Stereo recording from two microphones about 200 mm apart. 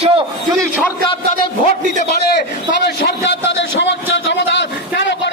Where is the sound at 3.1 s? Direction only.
60° left (ahead or behind).